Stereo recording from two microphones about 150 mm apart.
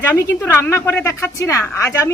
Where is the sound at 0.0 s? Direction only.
15° left (ahead or behind).